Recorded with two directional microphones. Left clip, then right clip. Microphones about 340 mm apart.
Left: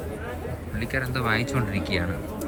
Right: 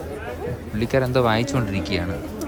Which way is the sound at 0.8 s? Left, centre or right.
Centre.